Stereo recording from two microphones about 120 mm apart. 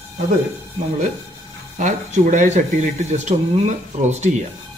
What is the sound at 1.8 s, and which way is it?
Speech, 90° right.